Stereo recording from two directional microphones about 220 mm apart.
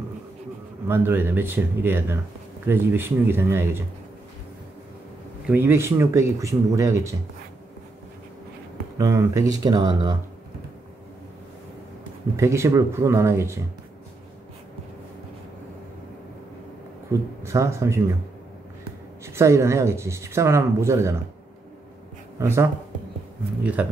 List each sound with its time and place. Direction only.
0.8 s speech: 10° right (ahead or behind)
5.5 s speech: 10° right (ahead or behind)
8.9 s speech: 15° right (ahead or behind)
12.4 s speech: 10° right (ahead or behind)
17.1 s speech: 15° right (ahead or behind)
19.2 s speech: 10° right (ahead or behind)
22.4 s speech: 10° right (ahead or behind)
23.8 s speech: 5° right (ahead or behind)